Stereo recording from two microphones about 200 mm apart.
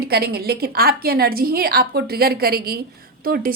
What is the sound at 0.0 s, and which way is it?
A woman's voice, 50° right (ahead or behind).